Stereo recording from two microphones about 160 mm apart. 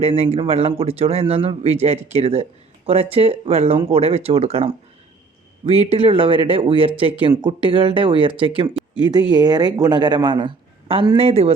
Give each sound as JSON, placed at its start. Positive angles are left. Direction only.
{"t": 0.0, "sound": "a woman's voice", "side_deg": -40}